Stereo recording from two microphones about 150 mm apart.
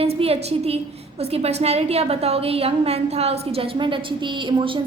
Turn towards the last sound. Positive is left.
turn(degrees=-35)  # may be behind; listen again after turning